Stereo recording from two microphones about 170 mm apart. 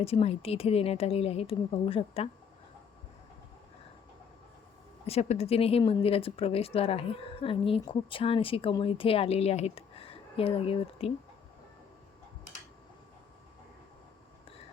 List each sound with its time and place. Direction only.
0.0 s a woman's voice: 35° left (ahead or behind)
5.0 s a woman's voice: 35° left (ahead or behind)